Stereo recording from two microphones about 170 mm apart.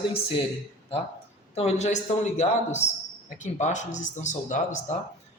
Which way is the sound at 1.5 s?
40° left (ahead or behind).